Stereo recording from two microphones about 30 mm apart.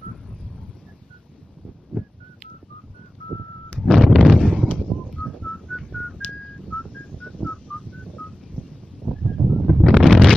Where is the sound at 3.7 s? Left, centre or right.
Centre.